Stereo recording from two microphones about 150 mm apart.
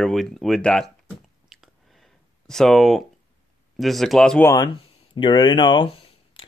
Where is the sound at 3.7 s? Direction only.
Centre (ahead or behind).